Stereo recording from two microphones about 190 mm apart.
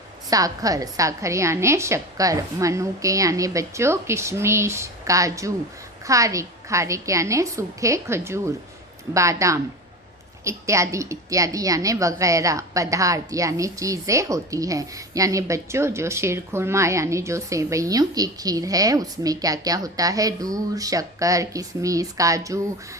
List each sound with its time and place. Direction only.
0.3 s a woman's voice: 20° right (ahead or behind)